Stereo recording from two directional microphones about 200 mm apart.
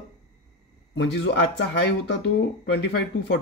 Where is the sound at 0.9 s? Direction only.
60° left (ahead or behind).